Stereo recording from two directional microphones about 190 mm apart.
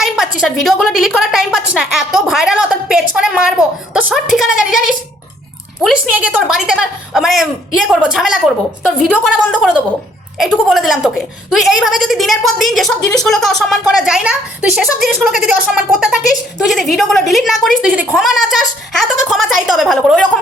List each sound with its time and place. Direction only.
0.0 s a sound: centre (ahead or behind)
4.1 s a woman's voice: centre (ahead or behind)
5.8 s a woman's voice: 5° right (ahead or behind)